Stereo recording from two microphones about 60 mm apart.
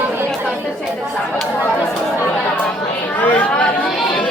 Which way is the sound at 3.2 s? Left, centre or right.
Left.